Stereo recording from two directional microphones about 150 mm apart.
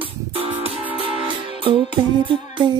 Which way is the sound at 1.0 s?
35° right (ahead or behind).